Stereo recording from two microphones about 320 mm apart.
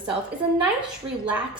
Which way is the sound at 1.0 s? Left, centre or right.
Centre.